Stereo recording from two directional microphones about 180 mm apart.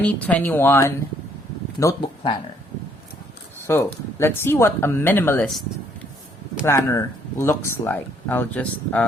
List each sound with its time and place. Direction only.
0.0 s speech: 10° left (ahead or behind)
3.7 s speech: 15° left (ahead or behind)
6.7 s speech: 15° left (ahead or behind)